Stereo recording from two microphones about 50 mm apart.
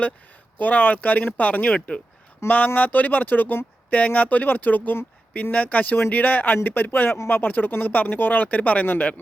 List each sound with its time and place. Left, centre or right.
0.6 s speech: left